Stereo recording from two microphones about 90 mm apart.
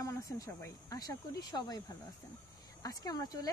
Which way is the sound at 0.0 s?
40° left (ahead or behind).